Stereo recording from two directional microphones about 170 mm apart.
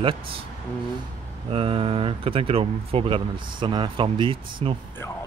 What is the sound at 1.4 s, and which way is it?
Speech, 35° right (ahead or behind).